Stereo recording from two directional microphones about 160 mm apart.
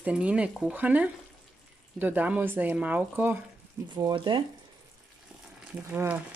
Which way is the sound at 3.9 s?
30° right (ahead or behind).